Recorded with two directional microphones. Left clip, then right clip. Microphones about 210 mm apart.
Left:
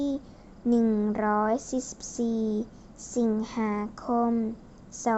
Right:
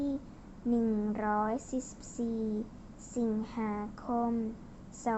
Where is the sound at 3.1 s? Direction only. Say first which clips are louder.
Left 7 dB; 55° left (ahead or behind).